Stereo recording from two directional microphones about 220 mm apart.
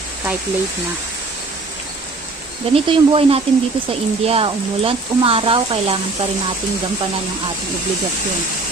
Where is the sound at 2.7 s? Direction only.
25° right (ahead or behind).